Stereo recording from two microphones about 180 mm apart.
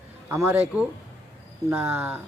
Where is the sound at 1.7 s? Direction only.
15° right (ahead or behind).